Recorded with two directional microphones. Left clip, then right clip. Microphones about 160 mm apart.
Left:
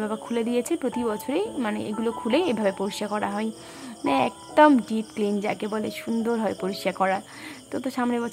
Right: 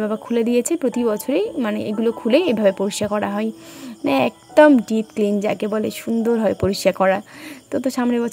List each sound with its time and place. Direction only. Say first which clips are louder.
0.0 s speech: right 7 dB; 35° right (ahead or behind)